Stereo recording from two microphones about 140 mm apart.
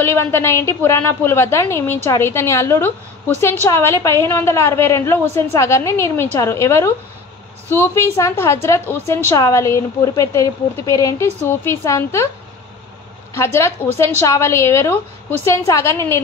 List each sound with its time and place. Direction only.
0.0 s a woman's voice: 15° left (ahead or behind)
13.3 s a woman's voice: 20° left (ahead or behind)